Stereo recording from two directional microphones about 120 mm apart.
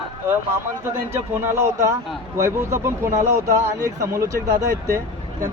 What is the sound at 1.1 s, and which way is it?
Speech, 20° right (ahead or behind).